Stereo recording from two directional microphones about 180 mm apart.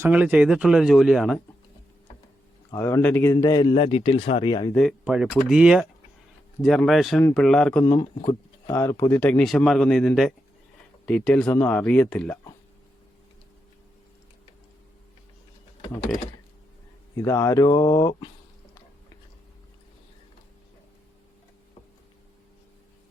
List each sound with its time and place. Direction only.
0.0 s speech: 10° right (ahead or behind)
2.7 s speech: 15° left (ahead or behind)
4.7 s speech: centre (ahead or behind)
7.9 s speech: 25° left (ahead or behind); by 12.4 s 10° left (ahead or behind)
17.2 s speech: 15° left (ahead or behind)